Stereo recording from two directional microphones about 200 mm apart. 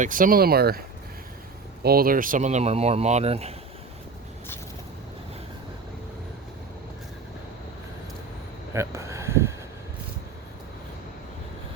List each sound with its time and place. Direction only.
0.0 s speech: 40° right (ahead or behind)
1.8 s speech: 50° right (ahead or behind); by 3.5 s 30° right (ahead or behind)
8.7 s a sound: 15° right (ahead or behind)